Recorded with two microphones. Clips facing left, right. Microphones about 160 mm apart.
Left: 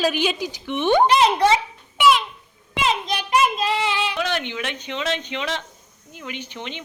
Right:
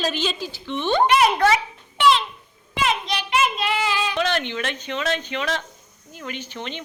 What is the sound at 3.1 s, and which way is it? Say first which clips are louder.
Child singing: left 2 dB; 35° left (ahead or behind).